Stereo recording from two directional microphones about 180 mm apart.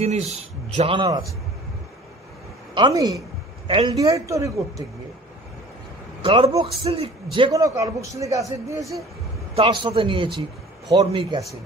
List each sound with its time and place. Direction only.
0.0 s speech: 35° right (ahead or behind)
2.7 s a man's voice: 25° right (ahead or behind)
3.6 s speech: 30° right (ahead or behind)
3.9 s a man's voice: 20° right (ahead or behind)
6.2 s a man's voice: 30° right (ahead or behind)